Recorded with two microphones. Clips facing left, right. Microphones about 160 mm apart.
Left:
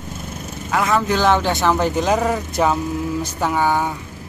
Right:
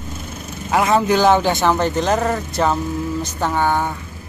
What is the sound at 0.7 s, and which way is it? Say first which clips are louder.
Speech: right 3 dB; 20° right (ahead or behind).